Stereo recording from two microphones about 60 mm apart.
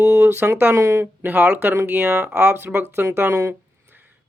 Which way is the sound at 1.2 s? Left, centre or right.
Right.